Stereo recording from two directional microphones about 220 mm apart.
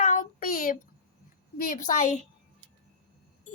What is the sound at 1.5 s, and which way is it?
Speech, 40° left (ahead or behind).